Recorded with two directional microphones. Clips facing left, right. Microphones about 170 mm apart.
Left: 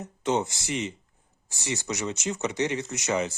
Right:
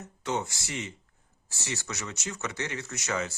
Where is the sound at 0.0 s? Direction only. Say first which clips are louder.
Left 5 dB; 20° left (ahead or behind).